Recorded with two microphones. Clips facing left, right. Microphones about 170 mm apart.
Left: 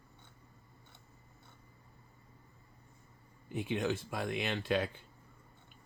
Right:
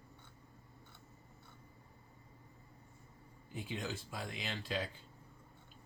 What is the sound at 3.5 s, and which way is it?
Speech, 65° left (ahead or behind).